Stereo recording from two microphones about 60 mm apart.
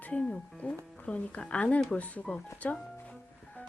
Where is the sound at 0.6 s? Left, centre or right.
Left.